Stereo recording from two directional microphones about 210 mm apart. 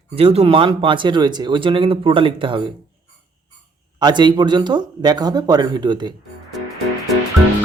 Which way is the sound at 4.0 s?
20° right (ahead or behind).